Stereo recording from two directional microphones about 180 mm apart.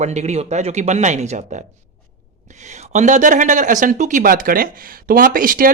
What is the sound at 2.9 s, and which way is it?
Speech, 40° right (ahead or behind).